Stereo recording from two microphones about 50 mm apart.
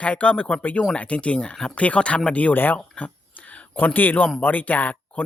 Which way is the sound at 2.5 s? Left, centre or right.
Left.